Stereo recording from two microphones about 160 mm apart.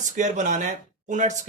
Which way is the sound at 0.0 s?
50° right (ahead or behind).